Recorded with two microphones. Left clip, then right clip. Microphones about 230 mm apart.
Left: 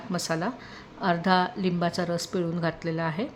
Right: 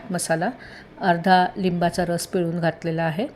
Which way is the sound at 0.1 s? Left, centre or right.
Centre.